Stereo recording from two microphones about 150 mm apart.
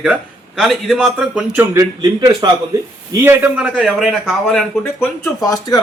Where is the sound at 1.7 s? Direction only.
25° right (ahead or behind).